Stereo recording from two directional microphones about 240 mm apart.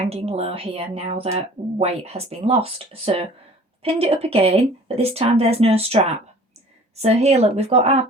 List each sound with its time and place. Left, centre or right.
0.0 s speech: right